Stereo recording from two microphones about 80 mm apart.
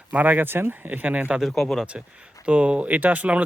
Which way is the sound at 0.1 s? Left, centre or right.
Right.